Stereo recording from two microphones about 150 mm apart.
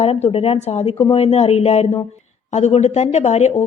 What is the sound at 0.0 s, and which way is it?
A woman's voice, 45° left (ahead or behind).